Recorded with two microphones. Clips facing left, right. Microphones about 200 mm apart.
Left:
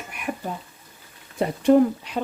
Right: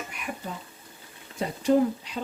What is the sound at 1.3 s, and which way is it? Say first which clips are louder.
Speech: left 5 dB; 60° left (ahead or behind).